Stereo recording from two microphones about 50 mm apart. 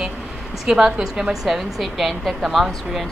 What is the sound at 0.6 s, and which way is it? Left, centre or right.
A woman's voice, centre.